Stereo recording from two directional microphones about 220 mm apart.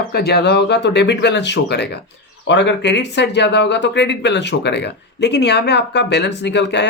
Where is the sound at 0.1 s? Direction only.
45° left (ahead or behind).